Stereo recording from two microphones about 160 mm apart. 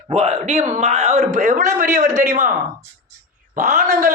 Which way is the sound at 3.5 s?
65° right (ahead or behind).